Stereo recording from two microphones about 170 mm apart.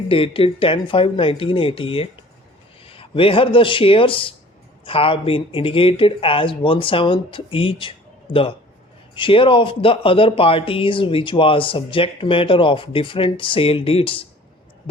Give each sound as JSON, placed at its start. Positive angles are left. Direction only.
{"t": 0.1, "sound": "a man's voice", "side_deg": 30}